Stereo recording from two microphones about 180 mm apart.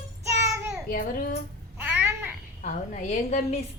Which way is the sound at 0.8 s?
50° left (ahead or behind).